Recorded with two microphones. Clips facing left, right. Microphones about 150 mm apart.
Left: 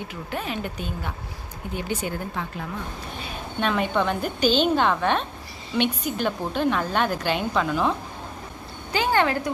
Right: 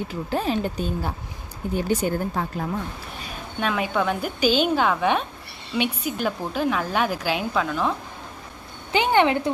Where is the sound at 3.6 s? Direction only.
5° right (ahead or behind).